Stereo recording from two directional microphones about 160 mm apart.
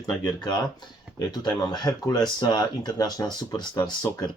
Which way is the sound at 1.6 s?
25° left (ahead or behind).